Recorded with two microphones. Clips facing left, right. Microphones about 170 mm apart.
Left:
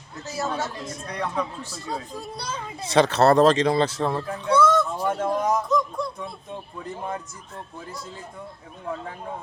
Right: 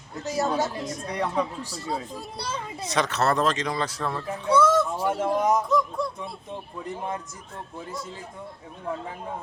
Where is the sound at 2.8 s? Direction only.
30° left (ahead or behind).